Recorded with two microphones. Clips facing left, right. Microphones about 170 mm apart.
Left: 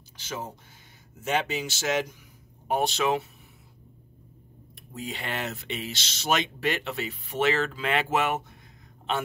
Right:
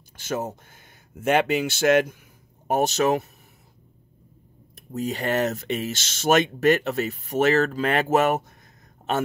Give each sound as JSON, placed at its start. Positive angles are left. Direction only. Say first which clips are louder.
{"t": 0.2, "sound": "speech", "louder": "right 8 dB", "side_deg": -50}
{"t": 1.1, "sound": "speech", "louder": "right 7 dB", "side_deg": -60}
{"t": 2.7, "sound": "speech", "louder": "right 4 dB", "side_deg": -45}
{"t": 4.7, "sound": "speech", "louder": "right 8 dB", "side_deg": -40}